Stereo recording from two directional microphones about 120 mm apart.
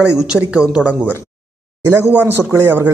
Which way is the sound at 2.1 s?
15° right (ahead or behind).